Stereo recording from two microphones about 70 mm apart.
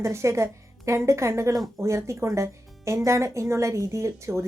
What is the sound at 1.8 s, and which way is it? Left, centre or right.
A woman's voice, right.